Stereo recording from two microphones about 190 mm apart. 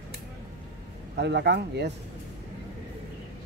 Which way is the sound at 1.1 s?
60° right (ahead or behind).